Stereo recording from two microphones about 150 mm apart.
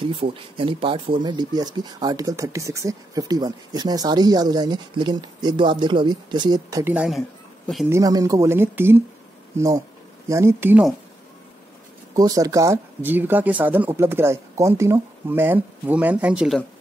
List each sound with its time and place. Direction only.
0.0 s speech: 35° right (ahead or behind)
6.8 s speech: 10° right (ahead or behind)
7.1 s a sound: centre (ahead or behind)
7.9 s speech: 25° right (ahead or behind)
12.2 s speech: 25° right (ahead or behind); by 16.5 s 10° right (ahead or behind)